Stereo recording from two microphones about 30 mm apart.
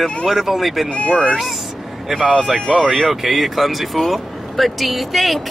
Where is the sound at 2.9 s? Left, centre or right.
Centre.